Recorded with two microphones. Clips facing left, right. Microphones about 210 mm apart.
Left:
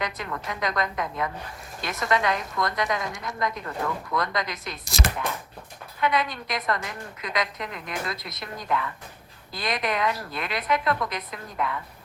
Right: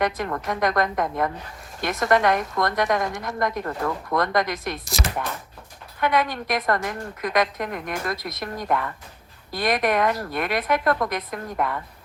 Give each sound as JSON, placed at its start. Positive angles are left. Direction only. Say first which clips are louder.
{"t": 0.0, "sound": "a woman's voice", "louder": "right 7 dB", "side_deg": -50}
{"t": 6.0, "sound": "a woman's voice", "louder": "right 3 dB", "side_deg": -50}